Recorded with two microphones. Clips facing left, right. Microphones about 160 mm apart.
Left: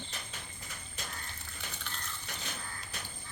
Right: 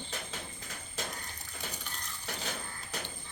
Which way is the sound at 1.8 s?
10° right (ahead or behind).